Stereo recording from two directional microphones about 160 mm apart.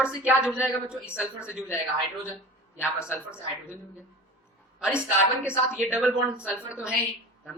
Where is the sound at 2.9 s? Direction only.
15° left (ahead or behind).